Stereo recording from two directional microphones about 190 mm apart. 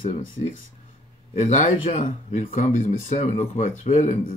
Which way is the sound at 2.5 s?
45° left (ahead or behind).